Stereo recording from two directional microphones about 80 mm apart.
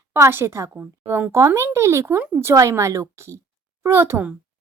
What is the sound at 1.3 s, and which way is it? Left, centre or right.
A woman's voice, right.